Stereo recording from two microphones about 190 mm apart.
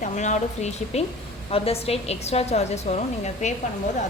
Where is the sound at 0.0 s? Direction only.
40° left (ahead or behind).